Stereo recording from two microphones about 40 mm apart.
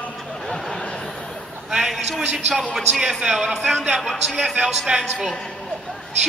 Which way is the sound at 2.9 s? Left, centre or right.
Centre.